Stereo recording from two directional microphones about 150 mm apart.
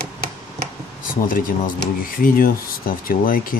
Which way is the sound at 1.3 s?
65° left (ahead or behind).